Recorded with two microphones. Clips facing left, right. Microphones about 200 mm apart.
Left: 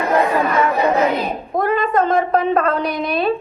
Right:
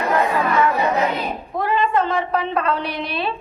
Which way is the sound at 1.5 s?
40° left (ahead or behind).